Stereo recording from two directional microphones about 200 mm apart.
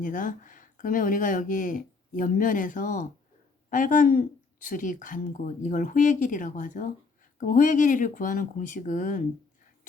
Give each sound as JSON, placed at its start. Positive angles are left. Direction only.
{"t": 0.0, "sound": "speech", "side_deg": 40}